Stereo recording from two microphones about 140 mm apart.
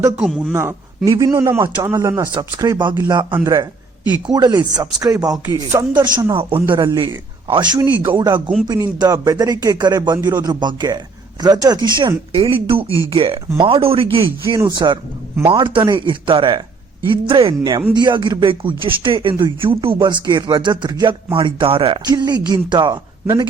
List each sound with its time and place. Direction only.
0.2 s speech: centre (ahead or behind)
0.5 s speech: 20° right (ahead or behind)
2.9 s speech: 15° right (ahead or behind); by 6.6 s 40° right (ahead or behind)
6.7 s speech: 25° right (ahead or behind)
7.4 s speech: 35° right (ahead or behind)
17.6 s speech: 30° right (ahead or behind)
22.0 s speech: 30° right (ahead or behind)
23.2 s speech: 20° right (ahead or behind)